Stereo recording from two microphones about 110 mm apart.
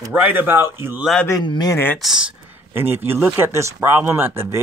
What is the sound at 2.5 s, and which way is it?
A man's voice, 20° right (ahead or behind).